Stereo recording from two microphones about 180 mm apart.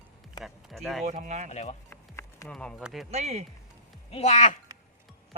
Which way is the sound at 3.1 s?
35° right (ahead or behind).